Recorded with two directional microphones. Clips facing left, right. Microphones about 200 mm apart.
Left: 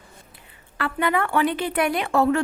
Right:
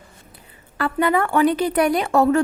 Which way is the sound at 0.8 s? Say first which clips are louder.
Right 4 dB; 40° right (ahead or behind).